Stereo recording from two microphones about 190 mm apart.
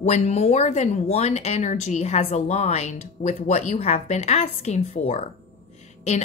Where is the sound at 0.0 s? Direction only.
35° left (ahead or behind).